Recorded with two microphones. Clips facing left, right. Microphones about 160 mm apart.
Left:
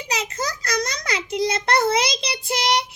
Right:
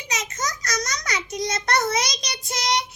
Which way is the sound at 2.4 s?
30° left (ahead or behind).